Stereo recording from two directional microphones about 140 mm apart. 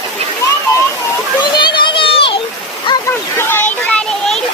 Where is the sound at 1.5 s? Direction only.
35° left (ahead or behind).